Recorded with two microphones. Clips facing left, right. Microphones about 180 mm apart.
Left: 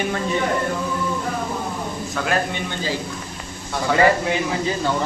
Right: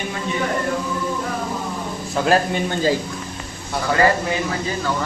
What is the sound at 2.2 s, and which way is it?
Speech, 40° right (ahead or behind).